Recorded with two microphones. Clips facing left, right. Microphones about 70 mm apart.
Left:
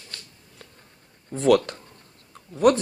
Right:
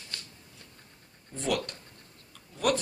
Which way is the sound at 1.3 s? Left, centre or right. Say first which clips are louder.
Left 12 dB; left.